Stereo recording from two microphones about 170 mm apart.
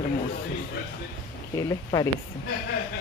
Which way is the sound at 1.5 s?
20° left (ahead or behind).